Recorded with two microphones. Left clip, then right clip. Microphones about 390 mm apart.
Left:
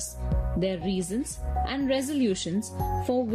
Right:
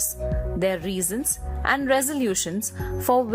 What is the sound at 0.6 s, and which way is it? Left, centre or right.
A woman's voice, centre.